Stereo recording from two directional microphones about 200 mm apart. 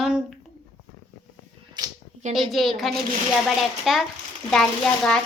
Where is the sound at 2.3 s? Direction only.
Centre (ahead or behind).